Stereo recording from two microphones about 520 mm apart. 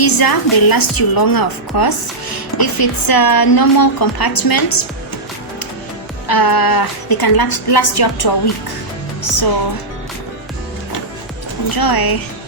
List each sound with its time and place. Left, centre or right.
0.0 s a woman's voice: left
6.2 s a woman's voice: left
11.7 s a woman's voice: left